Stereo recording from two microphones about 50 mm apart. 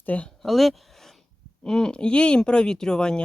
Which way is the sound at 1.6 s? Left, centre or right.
Centre.